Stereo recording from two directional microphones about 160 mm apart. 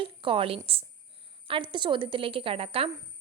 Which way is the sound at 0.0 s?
35° right (ahead or behind).